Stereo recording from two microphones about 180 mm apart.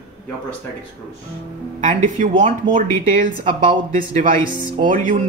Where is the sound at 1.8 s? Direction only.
45° right (ahead or behind).